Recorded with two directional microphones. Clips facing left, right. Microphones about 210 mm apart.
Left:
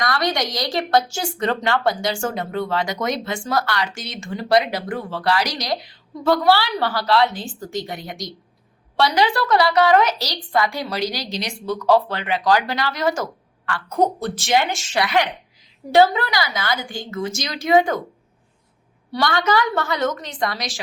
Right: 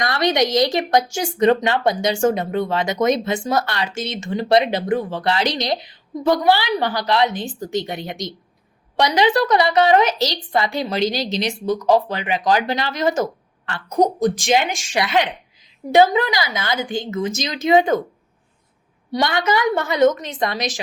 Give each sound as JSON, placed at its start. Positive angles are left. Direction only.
{"t": 0.0, "sound": "a woman's voice", "side_deg": -20}
{"t": 19.1, "sound": "speech", "side_deg": -20}